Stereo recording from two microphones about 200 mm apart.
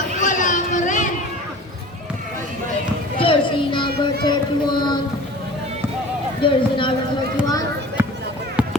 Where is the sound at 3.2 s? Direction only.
25° left (ahead or behind).